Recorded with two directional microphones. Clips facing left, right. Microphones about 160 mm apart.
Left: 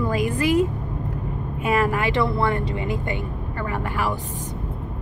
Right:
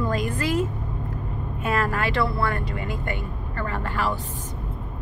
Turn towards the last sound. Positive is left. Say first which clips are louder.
# left 4 dB
turn(degrees=20)  # may be behind; listen again after turning